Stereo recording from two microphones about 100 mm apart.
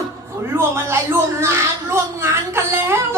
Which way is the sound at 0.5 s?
25° right (ahead or behind).